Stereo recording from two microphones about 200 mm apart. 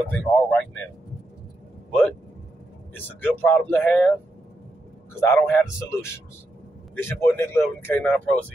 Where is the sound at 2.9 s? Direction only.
10° left (ahead or behind).